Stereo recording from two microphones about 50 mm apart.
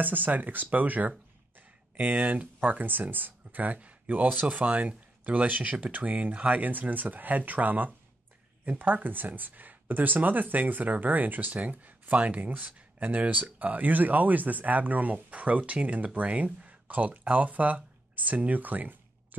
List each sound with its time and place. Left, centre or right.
0.0 s speech: right